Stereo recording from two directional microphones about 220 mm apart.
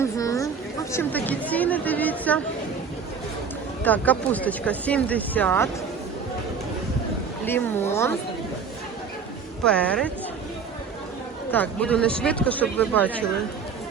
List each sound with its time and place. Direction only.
0.0 s a sound: 15° left (ahead or behind)
3.8 s speech: 5° left (ahead or behind)
7.4 s speech: 10° left (ahead or behind)
9.6 s a woman's voice: 5° left (ahead or behind)
11.5 s speech: 5° left (ahead or behind)